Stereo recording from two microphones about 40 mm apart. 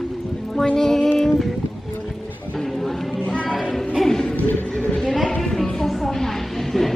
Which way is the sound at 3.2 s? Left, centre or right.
Left.